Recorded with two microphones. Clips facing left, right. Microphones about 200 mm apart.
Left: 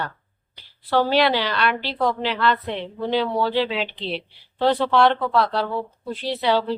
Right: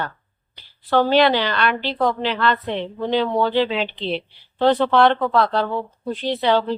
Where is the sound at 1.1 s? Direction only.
5° left (ahead or behind).